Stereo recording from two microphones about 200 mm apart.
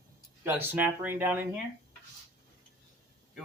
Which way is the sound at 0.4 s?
10° right (ahead or behind).